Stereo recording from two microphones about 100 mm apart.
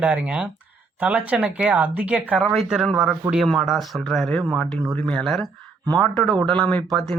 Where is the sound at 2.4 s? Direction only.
Centre (ahead or behind).